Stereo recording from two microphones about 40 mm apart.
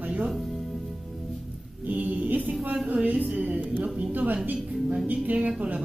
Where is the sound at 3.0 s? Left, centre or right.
Right.